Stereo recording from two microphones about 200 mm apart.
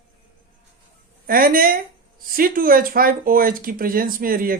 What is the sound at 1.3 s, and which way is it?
Speech, 45° right (ahead or behind).